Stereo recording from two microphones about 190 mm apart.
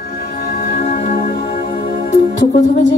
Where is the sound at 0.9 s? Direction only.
40° left (ahead or behind).